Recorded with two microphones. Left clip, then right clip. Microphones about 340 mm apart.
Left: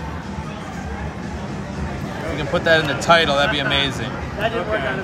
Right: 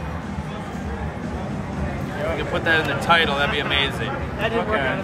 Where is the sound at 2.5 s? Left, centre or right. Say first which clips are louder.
Left 5 dB; centre.